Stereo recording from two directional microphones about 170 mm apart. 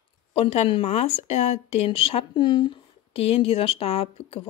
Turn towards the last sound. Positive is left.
turn(degrees=35)  # may be behind; listen again after turning